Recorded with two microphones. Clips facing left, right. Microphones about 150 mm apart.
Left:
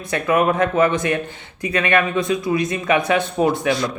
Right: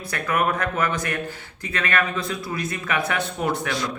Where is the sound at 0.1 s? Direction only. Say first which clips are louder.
Left 6 dB; 25° left (ahead or behind).